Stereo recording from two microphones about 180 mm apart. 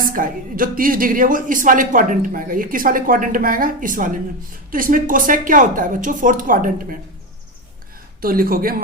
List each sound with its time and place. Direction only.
0.0 s speech: 50° right (ahead or behind)
8.2 s speech: 55° right (ahead or behind)